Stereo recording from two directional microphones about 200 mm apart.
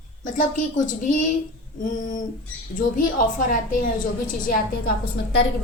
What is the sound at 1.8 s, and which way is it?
A woman's voice, 40° left (ahead or behind).